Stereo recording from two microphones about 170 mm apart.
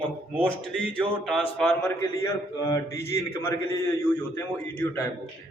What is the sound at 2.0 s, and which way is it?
A man's voice, 20° left (ahead or behind).